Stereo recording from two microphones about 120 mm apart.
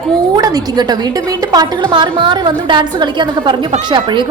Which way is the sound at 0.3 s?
30° right (ahead or behind).